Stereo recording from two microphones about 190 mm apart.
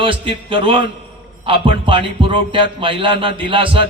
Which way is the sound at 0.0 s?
25° right (ahead or behind).